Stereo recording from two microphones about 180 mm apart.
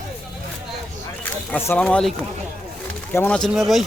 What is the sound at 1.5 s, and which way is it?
Speech, 10° left (ahead or behind).